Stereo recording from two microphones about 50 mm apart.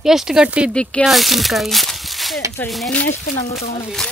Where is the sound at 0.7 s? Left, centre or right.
Left.